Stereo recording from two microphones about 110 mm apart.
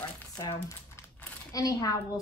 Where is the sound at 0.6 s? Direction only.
25° left (ahead or behind).